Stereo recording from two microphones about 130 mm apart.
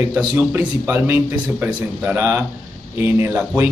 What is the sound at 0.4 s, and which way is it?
Speech, 15° right (ahead or behind).